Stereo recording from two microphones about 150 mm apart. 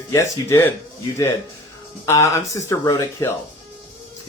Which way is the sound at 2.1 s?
20° left (ahead or behind).